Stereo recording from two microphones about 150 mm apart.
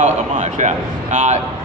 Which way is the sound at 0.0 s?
50° right (ahead or behind).